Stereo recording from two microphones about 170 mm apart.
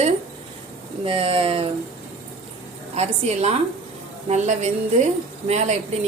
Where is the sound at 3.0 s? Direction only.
40° right (ahead or behind).